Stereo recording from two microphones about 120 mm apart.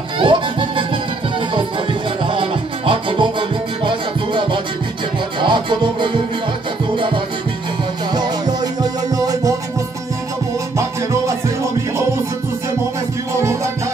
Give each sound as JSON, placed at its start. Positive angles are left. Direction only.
{"t": 0.2, "sound": "music", "side_deg": -45}
{"t": 2.2, "sound": "music", "side_deg": -45}
{"t": 8.1, "sound": "music", "side_deg": -35}